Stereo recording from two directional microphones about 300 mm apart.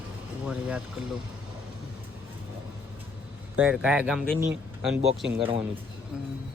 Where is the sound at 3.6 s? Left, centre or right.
Centre.